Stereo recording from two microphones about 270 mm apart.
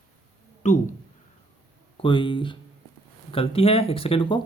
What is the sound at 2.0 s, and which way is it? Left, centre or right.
Speech, centre.